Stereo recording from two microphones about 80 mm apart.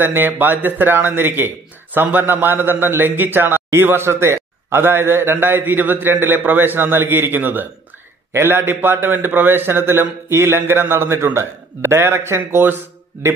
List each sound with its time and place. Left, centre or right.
0.0 s a man's voice: right